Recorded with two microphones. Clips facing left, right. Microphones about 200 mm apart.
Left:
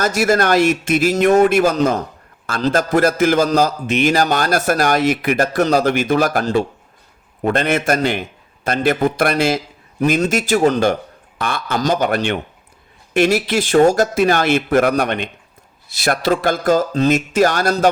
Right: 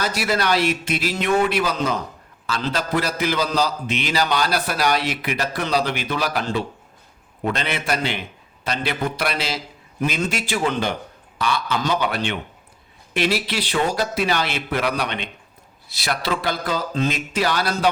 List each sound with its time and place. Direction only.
0.0 s a man's voice: 45° left (ahead or behind)